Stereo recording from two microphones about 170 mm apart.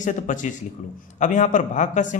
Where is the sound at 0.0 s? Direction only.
50° left (ahead or behind).